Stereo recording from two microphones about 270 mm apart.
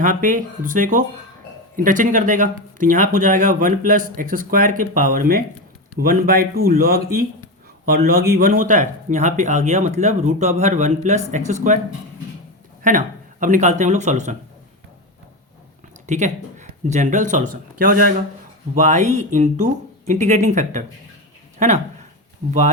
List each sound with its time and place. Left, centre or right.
0.0 s speech: right
8.4 s speech: right
12.8 s speech: right
16.0 s speech: right